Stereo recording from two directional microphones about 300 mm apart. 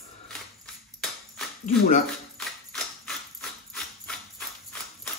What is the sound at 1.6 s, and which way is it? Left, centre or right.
Speech, left.